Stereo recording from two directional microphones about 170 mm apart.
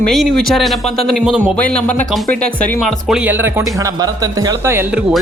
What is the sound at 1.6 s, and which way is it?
Speech, 10° left (ahead or behind).